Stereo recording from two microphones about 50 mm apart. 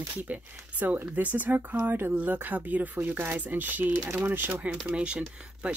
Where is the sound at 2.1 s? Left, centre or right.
Right.